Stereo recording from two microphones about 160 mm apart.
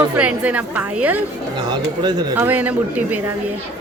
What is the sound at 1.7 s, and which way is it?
Speech, 25° right (ahead or behind).